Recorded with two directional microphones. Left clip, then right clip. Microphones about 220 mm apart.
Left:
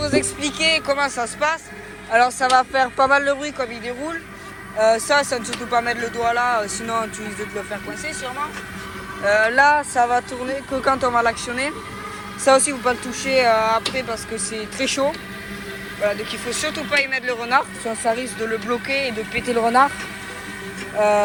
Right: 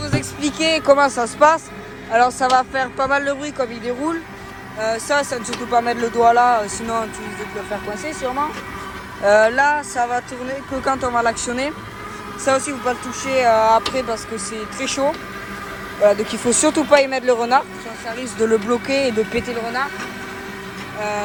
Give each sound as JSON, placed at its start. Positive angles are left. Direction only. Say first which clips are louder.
{"t": 0.0, "sound": "speech", "louder": "left 4 dB", "side_deg": -10}
{"t": 0.4, "sound": "speech", "louder": "right 7 dB", "side_deg": -25}
{"t": 4.8, "sound": "speech", "louder": "left 3 dB", "side_deg": -5}
{"t": 9.2, "sound": "speech", "louder": "right 2 dB", "side_deg": -20}
{"t": 9.7, "sound": "speech", "louder": "left 2 dB", "side_deg": 5}
{"t": 10.2, "sound": "speech", "louder": "left 2 dB", "side_deg": -5}
{"t": 16.4, "sound": "speech", "louder": "right 7 dB", "side_deg": -25}
{"t": 19.5, "sound": "speech", "louder": "left 7 dB", "side_deg": 0}